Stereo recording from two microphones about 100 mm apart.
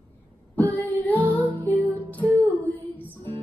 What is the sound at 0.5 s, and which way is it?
Female singing, 15° left (ahead or behind).